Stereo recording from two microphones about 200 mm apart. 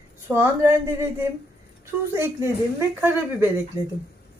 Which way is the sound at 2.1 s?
15° right (ahead or behind).